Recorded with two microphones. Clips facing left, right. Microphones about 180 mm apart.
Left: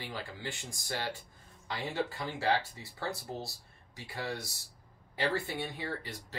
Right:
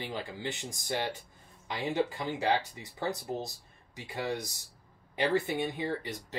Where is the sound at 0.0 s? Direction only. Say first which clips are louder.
Right 4 dB; 20° right (ahead or behind).